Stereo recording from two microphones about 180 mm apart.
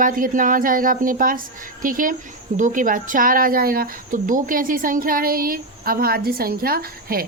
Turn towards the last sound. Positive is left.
turn(degrees=-55)  # may be behind; listen again after turning